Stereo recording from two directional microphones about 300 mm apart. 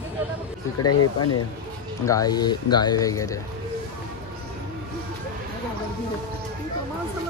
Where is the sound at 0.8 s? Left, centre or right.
Left.